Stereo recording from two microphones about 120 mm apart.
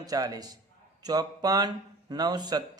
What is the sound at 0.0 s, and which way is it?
Speech, 30° right (ahead or behind).